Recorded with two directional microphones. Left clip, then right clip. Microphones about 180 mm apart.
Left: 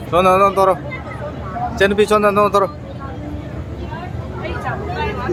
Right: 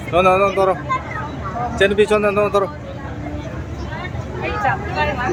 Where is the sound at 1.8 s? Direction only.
15° left (ahead or behind).